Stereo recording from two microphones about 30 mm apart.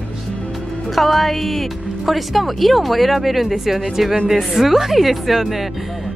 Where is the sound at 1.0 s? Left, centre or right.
Centre.